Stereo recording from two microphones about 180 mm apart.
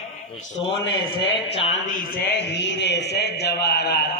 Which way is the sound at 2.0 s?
55° left (ahead or behind).